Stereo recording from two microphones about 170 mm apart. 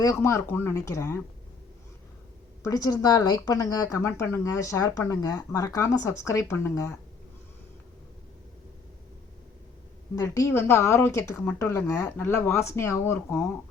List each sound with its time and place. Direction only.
0.0 s speech: 15° left (ahead or behind)
2.6 s speech: 20° left (ahead or behind)
10.2 s speech: 15° left (ahead or behind)